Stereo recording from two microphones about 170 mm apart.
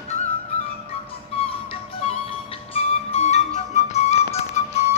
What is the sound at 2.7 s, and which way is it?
Flute, 40° left (ahead or behind).